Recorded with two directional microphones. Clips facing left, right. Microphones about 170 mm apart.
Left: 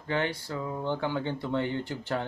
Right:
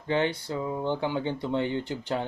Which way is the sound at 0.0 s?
20° right (ahead or behind).